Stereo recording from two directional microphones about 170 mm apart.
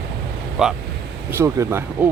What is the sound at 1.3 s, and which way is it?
Speech, 15° right (ahead or behind).